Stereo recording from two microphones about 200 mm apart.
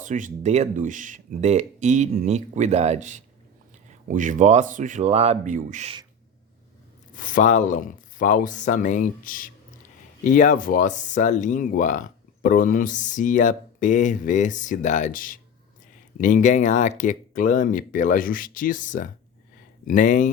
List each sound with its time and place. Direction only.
0.0 s speech: 40° right (ahead or behind)
7.1 s speech: 40° left (ahead or behind)